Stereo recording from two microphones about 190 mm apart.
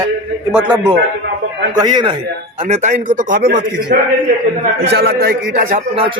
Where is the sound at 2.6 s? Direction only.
35° right (ahead or behind).